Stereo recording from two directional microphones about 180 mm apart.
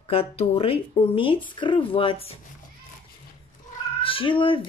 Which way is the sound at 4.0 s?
30° left (ahead or behind).